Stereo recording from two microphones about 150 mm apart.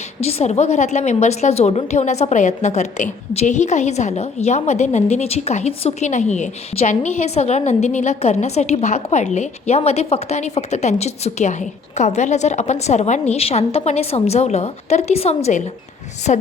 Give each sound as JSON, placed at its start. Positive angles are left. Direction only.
{"t": 0.2, "sound": "a woman's voice", "side_deg": 45}